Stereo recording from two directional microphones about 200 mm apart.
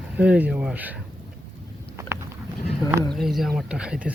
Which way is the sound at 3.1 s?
Centre (ahead or behind).